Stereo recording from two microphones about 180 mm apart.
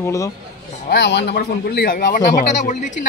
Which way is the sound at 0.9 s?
65° left (ahead or behind).